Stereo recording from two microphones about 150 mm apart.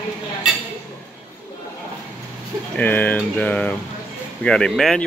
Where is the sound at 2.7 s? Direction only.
10° left (ahead or behind).